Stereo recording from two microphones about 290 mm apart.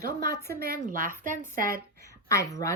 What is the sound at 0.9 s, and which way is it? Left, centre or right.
A woman's voice, right.